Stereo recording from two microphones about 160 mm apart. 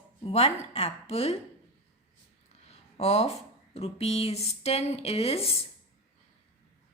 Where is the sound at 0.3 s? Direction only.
40° left (ahead or behind).